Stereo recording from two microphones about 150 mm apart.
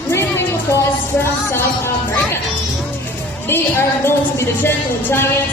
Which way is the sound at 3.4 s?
15° left (ahead or behind).